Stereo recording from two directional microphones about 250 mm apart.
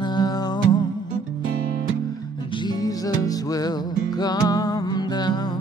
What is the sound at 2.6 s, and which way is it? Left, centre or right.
Music, centre.